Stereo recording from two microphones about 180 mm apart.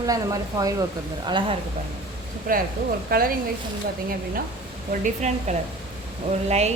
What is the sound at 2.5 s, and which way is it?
Speech, 50° right (ahead or behind).